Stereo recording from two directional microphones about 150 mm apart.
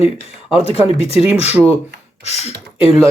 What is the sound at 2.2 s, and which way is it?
Speech, 45° left (ahead or behind).